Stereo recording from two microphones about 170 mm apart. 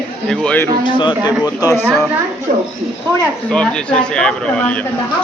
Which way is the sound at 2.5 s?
45° right (ahead or behind).